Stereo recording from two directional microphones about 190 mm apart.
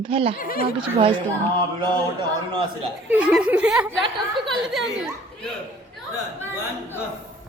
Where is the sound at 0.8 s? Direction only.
30° right (ahead or behind).